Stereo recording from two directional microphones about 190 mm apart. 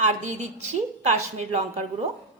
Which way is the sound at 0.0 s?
35° right (ahead or behind).